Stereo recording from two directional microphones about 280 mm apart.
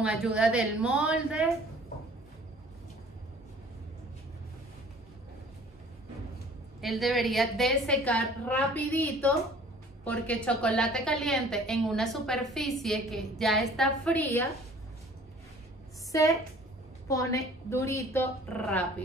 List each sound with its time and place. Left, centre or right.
0.0 s a woman's voice: centre
6.8 s a woman's voice: centre
16.1 s a woman's voice: centre